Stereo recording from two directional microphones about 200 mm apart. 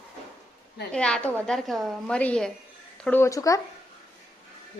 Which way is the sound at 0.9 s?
5° left (ahead or behind).